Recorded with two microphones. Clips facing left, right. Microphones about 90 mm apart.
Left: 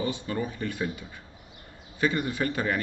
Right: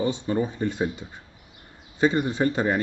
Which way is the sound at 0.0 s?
25° right (ahead or behind).